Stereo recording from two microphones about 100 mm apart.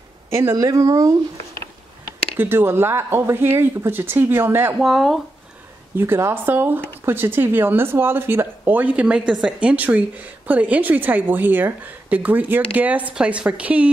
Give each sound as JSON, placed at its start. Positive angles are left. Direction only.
{"t": 0.3, "sound": "speech", "side_deg": -30}
{"t": 2.3, "sound": "speech", "side_deg": -20}
{"t": 4.7, "sound": "speech", "side_deg": -5}
{"t": 5.9, "sound": "a woman's voice", "side_deg": -25}